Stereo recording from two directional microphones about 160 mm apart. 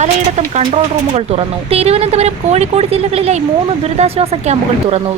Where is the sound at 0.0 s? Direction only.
45° right (ahead or behind).